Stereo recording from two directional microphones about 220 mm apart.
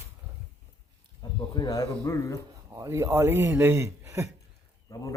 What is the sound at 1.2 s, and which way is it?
Speech, 15° left (ahead or behind).